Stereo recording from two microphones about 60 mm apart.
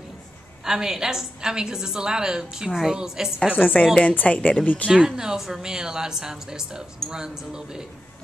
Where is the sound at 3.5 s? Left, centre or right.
Left.